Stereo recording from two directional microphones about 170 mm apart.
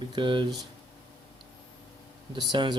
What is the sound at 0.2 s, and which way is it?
Speech, 30° right (ahead or behind).